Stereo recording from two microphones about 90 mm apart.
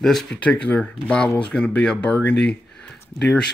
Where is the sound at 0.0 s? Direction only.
5° left (ahead or behind).